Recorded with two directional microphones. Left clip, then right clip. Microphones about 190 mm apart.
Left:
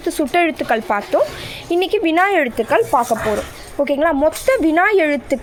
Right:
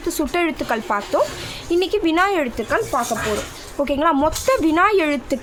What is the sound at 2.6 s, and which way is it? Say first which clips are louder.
Speech: left 6 dB; 20° left (ahead or behind).